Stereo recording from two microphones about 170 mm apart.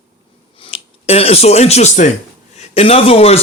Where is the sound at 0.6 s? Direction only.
35° left (ahead or behind).